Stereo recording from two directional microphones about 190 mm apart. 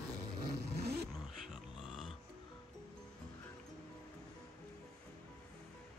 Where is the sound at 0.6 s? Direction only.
60° right (ahead or behind).